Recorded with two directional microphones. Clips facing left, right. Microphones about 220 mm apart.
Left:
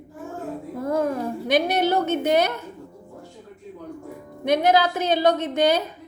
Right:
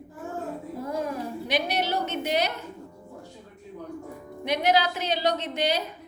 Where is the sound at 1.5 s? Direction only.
50° left (ahead or behind).